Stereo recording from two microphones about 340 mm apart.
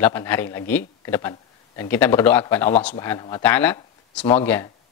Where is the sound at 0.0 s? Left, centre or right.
Centre.